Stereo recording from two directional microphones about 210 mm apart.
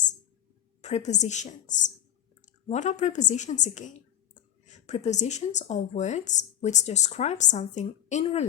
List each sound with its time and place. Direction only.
0.8 s a woman's voice: 30° left (ahead or behind)